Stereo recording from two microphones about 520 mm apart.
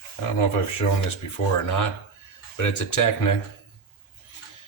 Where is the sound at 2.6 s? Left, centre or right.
Left.